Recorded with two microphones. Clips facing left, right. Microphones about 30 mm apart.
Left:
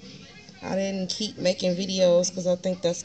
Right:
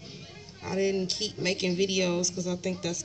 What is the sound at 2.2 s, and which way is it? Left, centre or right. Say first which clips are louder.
Speech: left 6 dB; left.